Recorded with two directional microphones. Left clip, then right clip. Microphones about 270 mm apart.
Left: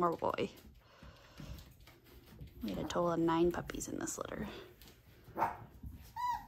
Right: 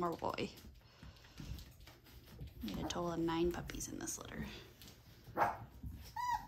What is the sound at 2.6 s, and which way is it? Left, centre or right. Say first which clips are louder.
Speech: left 6 dB; centre.